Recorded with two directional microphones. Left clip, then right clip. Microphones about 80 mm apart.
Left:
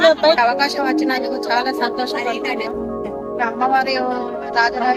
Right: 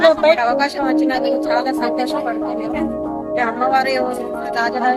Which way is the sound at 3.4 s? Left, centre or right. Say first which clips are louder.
Even; centre.